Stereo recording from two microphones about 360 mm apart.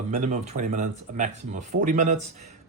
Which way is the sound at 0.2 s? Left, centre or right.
Centre.